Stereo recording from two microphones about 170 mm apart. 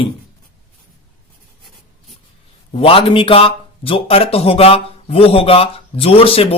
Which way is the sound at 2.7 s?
35° left (ahead or behind).